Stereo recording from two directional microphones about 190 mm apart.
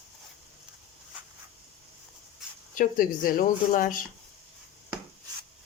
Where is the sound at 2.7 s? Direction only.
45° left (ahead or behind).